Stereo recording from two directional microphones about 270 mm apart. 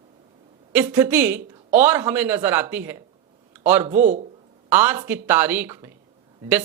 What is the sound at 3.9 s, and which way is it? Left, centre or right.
Speech, right.